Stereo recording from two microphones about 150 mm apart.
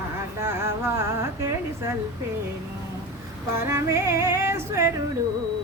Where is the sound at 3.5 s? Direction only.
20° right (ahead or behind).